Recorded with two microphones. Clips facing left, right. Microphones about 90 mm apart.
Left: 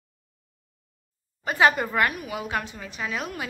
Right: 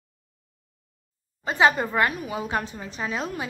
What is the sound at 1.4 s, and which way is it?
A woman's voice, 20° right (ahead or behind).